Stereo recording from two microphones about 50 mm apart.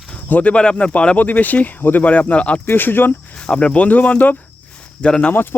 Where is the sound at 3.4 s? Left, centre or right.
Centre.